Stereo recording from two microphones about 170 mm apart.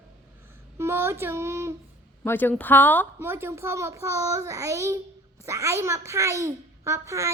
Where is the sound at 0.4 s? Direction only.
15° right (ahead or behind).